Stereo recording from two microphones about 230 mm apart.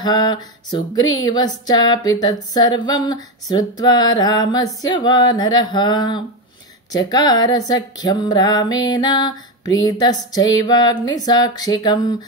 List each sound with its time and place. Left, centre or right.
0.0 s speech: centre